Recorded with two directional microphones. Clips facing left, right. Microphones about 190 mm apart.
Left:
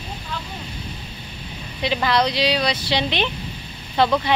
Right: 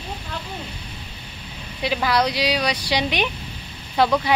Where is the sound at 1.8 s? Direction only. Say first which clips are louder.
Left 1 dB; 5° right (ahead or behind).